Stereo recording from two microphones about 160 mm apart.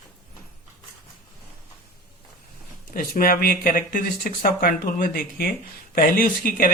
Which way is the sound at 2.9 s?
65° left (ahead or behind).